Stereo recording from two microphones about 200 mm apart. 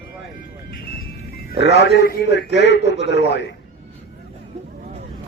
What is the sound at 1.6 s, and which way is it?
A man's voice, 55° left (ahead or behind).